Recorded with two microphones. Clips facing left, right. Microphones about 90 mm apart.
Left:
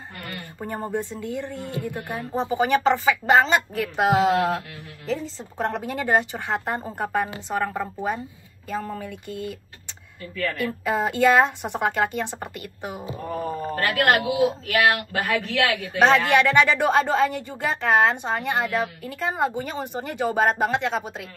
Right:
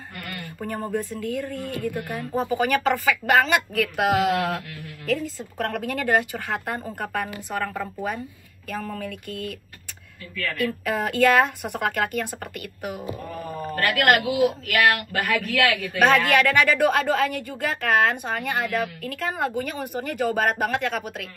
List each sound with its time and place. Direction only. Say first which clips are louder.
0.3 s a man's voice: right 1 dB; 30° left (ahead or behind)